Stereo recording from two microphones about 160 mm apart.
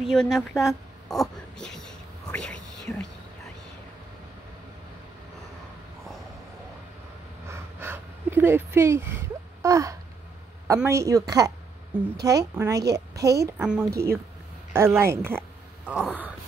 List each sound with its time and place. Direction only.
0.0 s whispering: centre (ahead or behind)
7.4 s a sound: 15° right (ahead or behind)
10.9 s a woman's voice: 20° right (ahead or behind)
11.9 s a woman's voice: 10° right (ahead or behind)
13.7 s a woman's voice: 5° right (ahead or behind)
14.7 s speech: 15° right (ahead or behind)